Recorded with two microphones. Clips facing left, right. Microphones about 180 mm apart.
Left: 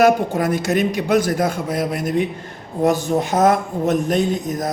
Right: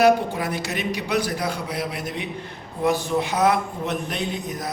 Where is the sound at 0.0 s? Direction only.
45° left (ahead or behind).